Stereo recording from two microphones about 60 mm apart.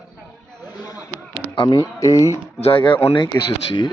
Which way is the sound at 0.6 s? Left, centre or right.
Left.